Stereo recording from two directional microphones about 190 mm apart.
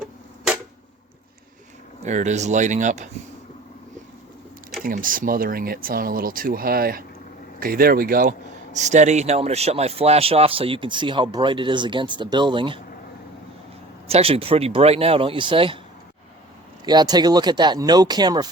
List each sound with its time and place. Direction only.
2.0 s speech: 40° right (ahead or behind)
4.8 s speech: 45° right (ahead or behind); by 12.8 s 25° right (ahead or behind)
14.1 s speech: 30° right (ahead or behind)
16.8 s speech: 20° right (ahead or behind)